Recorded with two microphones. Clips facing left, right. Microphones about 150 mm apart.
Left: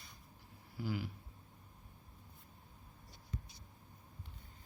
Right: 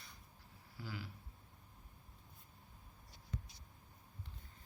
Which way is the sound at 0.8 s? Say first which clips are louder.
Left 8 dB; 15° left (ahead or behind).